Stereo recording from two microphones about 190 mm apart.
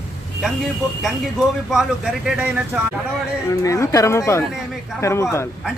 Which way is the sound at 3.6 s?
15° left (ahead or behind).